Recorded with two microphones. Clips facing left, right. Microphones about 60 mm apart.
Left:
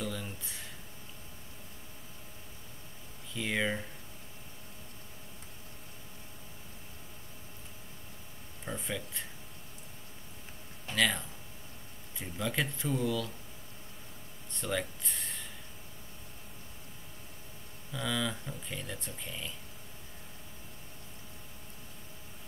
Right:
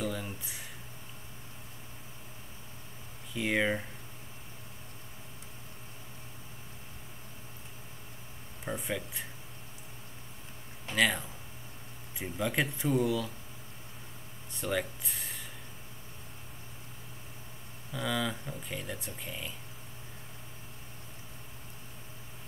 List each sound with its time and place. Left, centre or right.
0.0 s a sound: centre
3.3 s speech: centre
8.6 s speech: centre
10.9 s speech: centre
14.5 s speech: centre
17.9 s speech: centre